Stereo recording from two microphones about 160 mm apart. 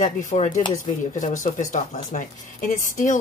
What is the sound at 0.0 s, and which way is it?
Speech, 50° left (ahead or behind).